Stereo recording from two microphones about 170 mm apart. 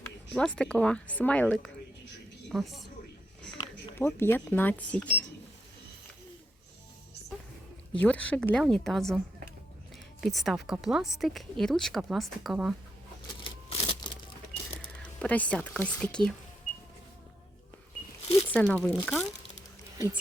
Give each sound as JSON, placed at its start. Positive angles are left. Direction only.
{"t": 0.3, "sound": "a woman's voice", "side_deg": 5}
{"t": 3.6, "sound": "speech", "side_deg": 10}
{"t": 7.9, "sound": "speech", "side_deg": 10}
{"t": 13.4, "sound": "typewriter", "side_deg": 35}
{"t": 15.2, "sound": "a woman's voice", "side_deg": 10}
{"t": 18.5, "sound": "a woman's voice", "side_deg": 5}